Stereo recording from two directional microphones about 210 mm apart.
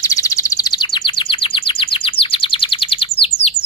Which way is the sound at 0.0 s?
15° left (ahead or behind).